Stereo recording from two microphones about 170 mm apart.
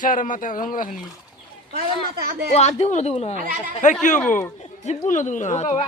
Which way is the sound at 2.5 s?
40° left (ahead or behind).